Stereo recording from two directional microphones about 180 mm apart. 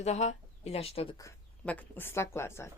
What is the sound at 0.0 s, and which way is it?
Speech, 40° left (ahead or behind).